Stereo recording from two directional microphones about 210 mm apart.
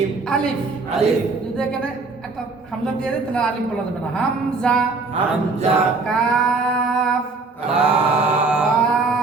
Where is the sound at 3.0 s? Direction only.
5° left (ahead or behind).